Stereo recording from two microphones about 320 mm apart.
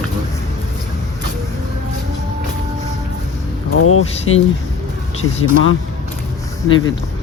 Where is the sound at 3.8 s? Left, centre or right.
Left.